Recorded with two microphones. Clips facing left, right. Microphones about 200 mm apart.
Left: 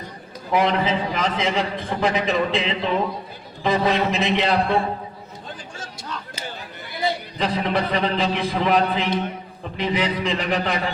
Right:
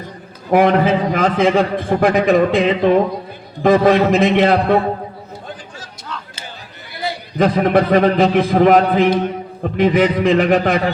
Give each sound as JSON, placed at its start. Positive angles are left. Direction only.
{"t": 0.5, "sound": "a man's voice", "side_deg": -50}
{"t": 5.8, "sound": "chatter", "side_deg": 35}
{"t": 7.3, "sound": "a man's voice", "side_deg": -50}